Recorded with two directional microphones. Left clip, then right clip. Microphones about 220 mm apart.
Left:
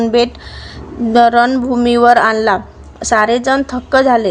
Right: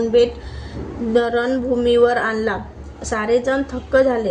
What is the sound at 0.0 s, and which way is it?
A woman's voice, 40° left (ahead or behind).